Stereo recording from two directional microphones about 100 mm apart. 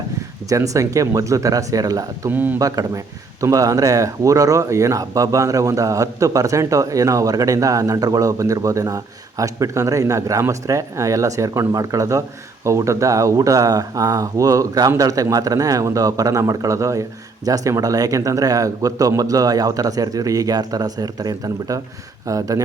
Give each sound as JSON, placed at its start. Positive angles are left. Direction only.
{"t": 0.4, "sound": "speech", "side_deg": -35}
{"t": 2.3, "sound": "a man's voice", "side_deg": -20}
{"t": 2.6, "sound": "speech", "side_deg": -35}